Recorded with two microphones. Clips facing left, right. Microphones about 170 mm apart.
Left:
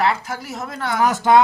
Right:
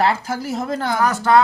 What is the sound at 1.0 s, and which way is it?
Speech, 20° left (ahead or behind).